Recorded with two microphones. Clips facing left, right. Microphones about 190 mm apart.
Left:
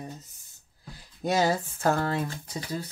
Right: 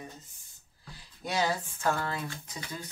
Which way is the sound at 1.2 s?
45° left (ahead or behind).